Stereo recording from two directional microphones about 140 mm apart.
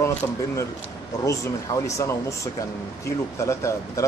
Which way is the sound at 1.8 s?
20° left (ahead or behind).